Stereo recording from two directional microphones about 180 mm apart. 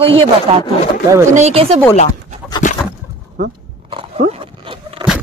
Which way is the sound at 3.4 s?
45° right (ahead or behind).